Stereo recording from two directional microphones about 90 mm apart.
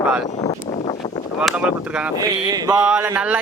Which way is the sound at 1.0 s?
45° left (ahead or behind).